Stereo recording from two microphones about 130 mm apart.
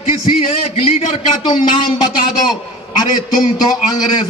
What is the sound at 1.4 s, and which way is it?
Speech, 35° left (ahead or behind).